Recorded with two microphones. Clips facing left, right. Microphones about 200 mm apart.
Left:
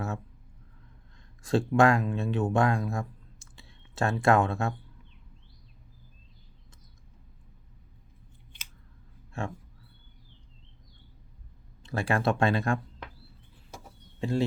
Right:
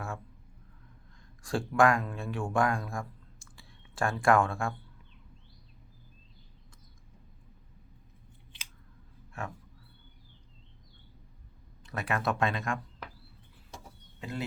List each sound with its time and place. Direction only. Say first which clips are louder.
1.4 s speech: left 3 dB; 25° left (ahead or behind)
9.4 s speech: left 5 dB; 25° left (ahead or behind)
11.8 s speech: left 5 dB; 30° left (ahead or behind)
14.2 s speech: left 9 dB; 30° left (ahead or behind)